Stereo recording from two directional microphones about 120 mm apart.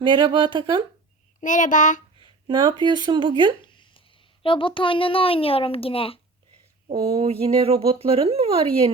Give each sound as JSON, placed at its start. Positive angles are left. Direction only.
{"t": 0.0, "sound": "speech", "side_deg": -40}
{"t": 1.4, "sound": "a child's voice", "side_deg": 90}
{"t": 2.2, "sound": "speech", "side_deg": -40}
{"t": 3.7, "sound": "a sound", "side_deg": 40}
{"t": 4.4, "sound": "a child's voice", "side_deg": 45}
{"t": 6.9, "sound": "speech", "side_deg": -45}